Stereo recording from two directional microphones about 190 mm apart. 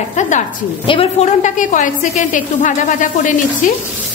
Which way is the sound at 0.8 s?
30° left (ahead or behind).